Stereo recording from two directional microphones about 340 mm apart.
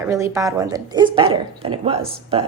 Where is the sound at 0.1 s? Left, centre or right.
Centre.